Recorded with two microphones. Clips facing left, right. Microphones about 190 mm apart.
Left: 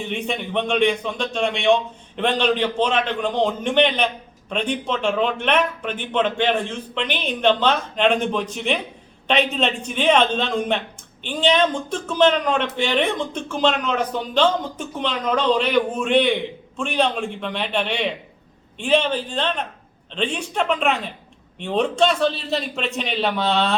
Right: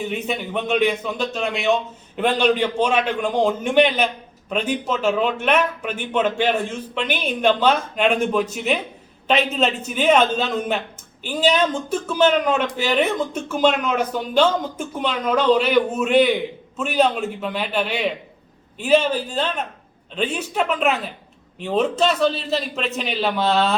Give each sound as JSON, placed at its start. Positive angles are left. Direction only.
{"t": 0.0, "sound": "a man's voice", "side_deg": -5}